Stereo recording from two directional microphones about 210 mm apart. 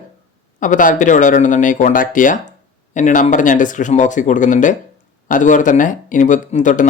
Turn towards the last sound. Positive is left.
turn(degrees=35)  # may be behind; listen again after turning